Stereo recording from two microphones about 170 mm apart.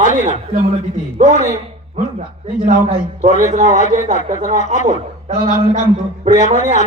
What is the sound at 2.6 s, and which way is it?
A man's voice, 45° right (ahead or behind).